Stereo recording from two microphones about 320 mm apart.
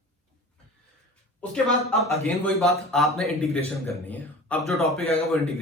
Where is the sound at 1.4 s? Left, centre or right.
Centre.